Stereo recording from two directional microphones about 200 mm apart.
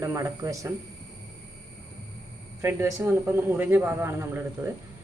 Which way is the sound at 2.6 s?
15° right (ahead or behind).